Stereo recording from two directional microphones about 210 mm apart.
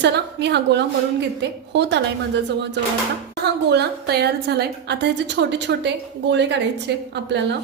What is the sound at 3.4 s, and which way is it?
A woman's voice, 50° right (ahead or behind).